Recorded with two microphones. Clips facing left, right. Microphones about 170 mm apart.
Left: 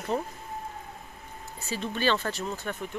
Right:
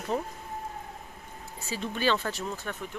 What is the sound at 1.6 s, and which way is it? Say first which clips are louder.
Speech: left 1 dB; 5° right (ahead or behind).